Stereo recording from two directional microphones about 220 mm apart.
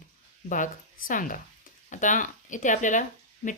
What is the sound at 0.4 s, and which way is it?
Speech, 35° left (ahead or behind).